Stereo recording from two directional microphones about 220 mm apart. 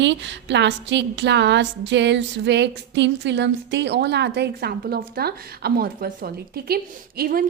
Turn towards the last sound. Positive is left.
turn(degrees=-40)  # may be behind; listen again after turning